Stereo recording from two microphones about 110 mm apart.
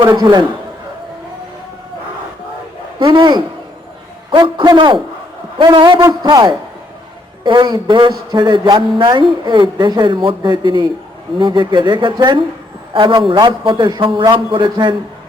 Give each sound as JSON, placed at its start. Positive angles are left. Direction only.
{"t": 0.2, "sound": "speech", "side_deg": -40}
{"t": 3.0, "sound": "speech", "side_deg": -40}